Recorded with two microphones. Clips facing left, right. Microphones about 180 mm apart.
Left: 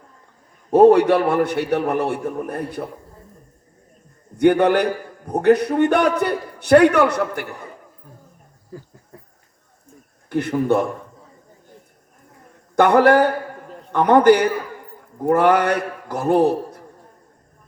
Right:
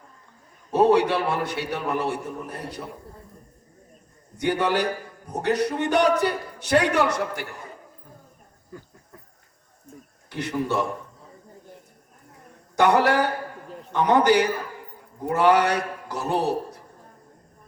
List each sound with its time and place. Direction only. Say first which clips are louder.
0.7 s a man's voice: left 7 dB; 50° left (ahead or behind)
4.4 s a man's voice: left 8 dB; 55° left (ahead or behind)
8.7 s a sound: left 5 dB; 30° left (ahead or behind)
10.2 s a man's voice: left 8 dB; 55° left (ahead or behind)
12.7 s a man's voice: left 6 dB; 55° left (ahead or behind)